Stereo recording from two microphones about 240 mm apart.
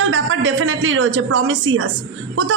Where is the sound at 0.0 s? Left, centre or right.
Right.